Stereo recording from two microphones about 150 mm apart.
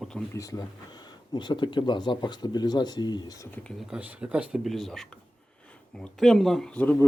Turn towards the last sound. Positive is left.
turn(degrees=10)  # may be behind; listen again after turning